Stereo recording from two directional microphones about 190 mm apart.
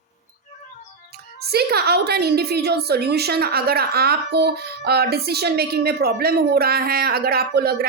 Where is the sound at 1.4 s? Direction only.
55° right (ahead or behind).